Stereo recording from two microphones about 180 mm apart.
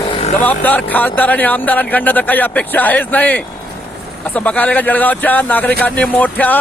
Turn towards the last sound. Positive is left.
turn(degrees=10)  # may be behind; listen again after turning